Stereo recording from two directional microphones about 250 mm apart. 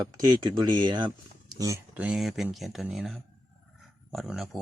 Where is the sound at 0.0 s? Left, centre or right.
Centre.